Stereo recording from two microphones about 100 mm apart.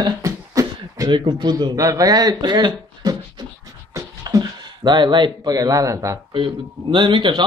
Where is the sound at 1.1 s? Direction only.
45° right (ahead or behind).